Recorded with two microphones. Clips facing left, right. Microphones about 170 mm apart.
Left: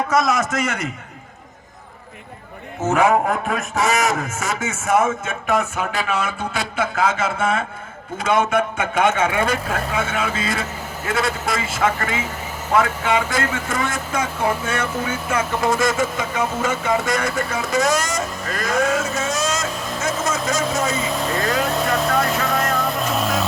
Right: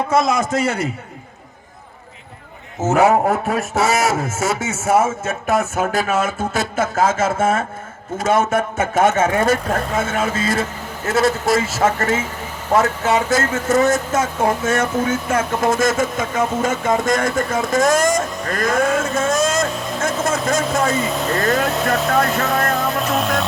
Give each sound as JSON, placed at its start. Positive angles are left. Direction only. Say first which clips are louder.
{"t": 0.1, "sound": "a man's voice", "louder": "right 3 dB", "side_deg": -30}
{"t": 2.8, "sound": "a man's voice", "louder": "right 3 dB", "side_deg": -40}
{"t": 20.9, "sound": "speech", "louder": "right 3 dB", "side_deg": 0}
{"t": 22.6, "sound": "vehicle", "louder": "right 2 dB", "side_deg": 0}